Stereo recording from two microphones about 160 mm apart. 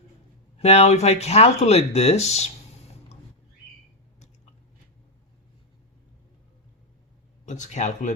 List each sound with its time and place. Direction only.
0.6 s speech: 40° left (ahead or behind)
7.4 s speech: 50° left (ahead or behind)